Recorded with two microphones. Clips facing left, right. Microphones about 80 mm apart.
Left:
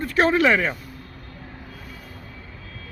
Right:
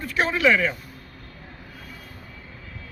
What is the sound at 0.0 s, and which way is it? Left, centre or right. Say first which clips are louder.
Speech: left 3 dB; left.